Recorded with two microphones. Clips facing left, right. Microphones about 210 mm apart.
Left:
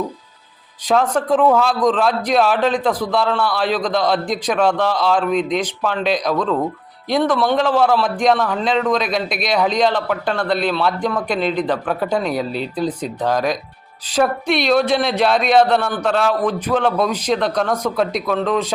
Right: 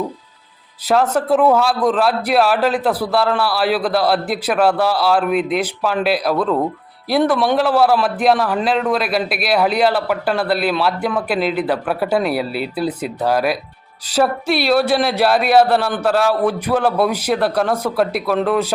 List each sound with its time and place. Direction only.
0.9 s a man's voice: 5° right (ahead or behind)